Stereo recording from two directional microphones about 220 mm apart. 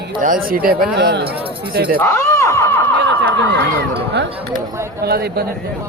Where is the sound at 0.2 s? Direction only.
40° right (ahead or behind).